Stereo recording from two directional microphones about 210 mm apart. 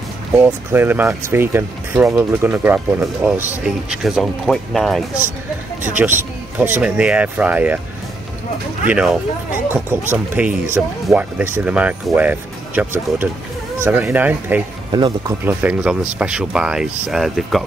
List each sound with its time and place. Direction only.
0.4 s speech: 10° right (ahead or behind)
5.9 s speech: 10° right (ahead or behind)
8.8 s speech: 5° right (ahead or behind)
14.9 s speech: 20° right (ahead or behind)
15.6 s speech: 5° right (ahead or behind)